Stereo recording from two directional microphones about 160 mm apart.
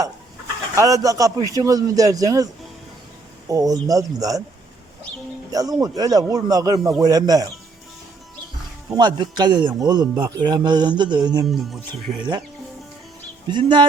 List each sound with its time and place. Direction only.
0.8 s a man's voice: 20° right (ahead or behind)
3.5 s a man's voice: 25° right (ahead or behind)
5.5 s a man's voice: 20° right (ahead or behind)
8.9 s a man's voice: 25° right (ahead or behind)
11.4 s speech: centre (ahead or behind)
13.5 s a man's voice: 30° right (ahead or behind)